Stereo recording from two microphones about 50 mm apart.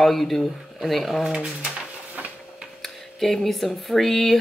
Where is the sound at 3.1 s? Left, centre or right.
Centre.